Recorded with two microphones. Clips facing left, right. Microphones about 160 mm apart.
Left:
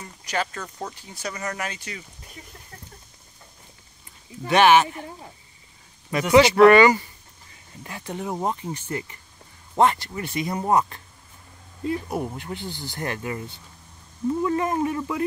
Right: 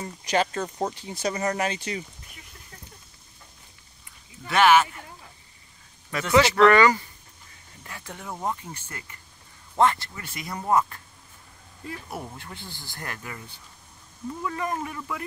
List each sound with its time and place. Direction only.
0.2 s speech: 20° right (ahead or behind)
4.5 s speech: 20° left (ahead or behind)
6.1 s speech: 15° left (ahead or behind)
14.4 s speech: 25° left (ahead or behind)